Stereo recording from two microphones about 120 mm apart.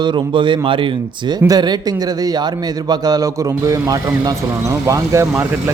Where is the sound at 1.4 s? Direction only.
35° right (ahead or behind).